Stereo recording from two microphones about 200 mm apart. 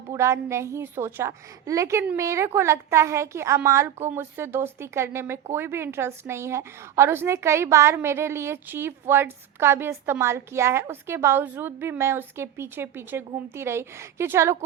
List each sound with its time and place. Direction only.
0.1 s a woman's voice: 15° right (ahead or behind)